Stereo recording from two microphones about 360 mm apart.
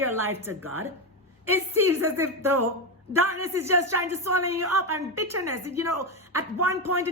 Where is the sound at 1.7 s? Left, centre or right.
Right.